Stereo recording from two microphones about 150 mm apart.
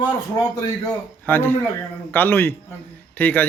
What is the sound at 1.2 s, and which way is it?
A man's voice, 15° left (ahead or behind).